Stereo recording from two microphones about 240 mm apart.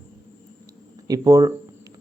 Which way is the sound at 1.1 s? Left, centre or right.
Centre.